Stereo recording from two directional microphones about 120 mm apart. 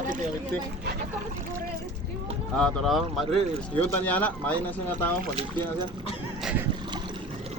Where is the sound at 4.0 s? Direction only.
15° left (ahead or behind).